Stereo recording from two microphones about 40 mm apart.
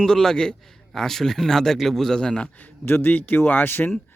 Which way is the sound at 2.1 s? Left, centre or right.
Left.